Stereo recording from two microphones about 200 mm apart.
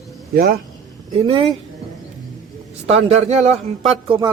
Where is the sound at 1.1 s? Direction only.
25° right (ahead or behind).